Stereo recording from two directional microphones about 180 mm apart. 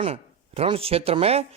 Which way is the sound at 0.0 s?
35° right (ahead or behind).